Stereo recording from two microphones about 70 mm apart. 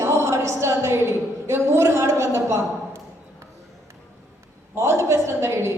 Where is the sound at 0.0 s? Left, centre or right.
Right.